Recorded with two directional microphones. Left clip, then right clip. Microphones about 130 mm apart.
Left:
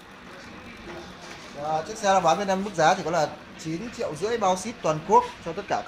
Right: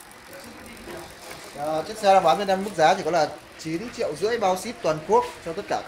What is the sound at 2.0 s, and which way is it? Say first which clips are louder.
Speech: right 4 dB; 50° left (ahead or behind).